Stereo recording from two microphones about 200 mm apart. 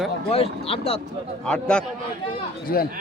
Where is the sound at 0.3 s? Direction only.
30° left (ahead or behind).